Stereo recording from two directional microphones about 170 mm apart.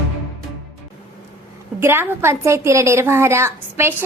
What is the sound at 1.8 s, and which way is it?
A woman's voice, 15° right (ahead or behind).